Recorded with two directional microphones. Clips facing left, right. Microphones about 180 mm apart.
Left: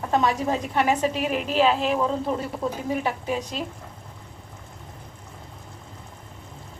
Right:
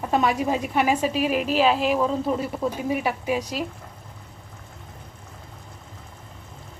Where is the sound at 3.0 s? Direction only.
10° right (ahead or behind).